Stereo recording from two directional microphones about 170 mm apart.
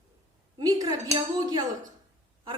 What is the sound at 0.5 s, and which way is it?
A woman's voice, 25° right (ahead or behind).